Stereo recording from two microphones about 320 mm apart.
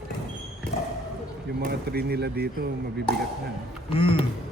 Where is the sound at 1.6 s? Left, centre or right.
Right.